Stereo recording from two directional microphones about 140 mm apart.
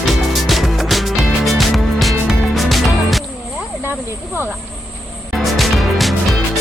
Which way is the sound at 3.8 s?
15° right (ahead or behind).